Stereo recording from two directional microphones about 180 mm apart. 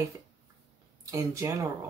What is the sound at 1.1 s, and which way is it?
Speech, 15° right (ahead or behind).